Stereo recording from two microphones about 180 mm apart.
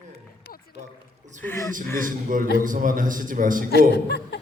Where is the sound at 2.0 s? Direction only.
50° right (ahead or behind).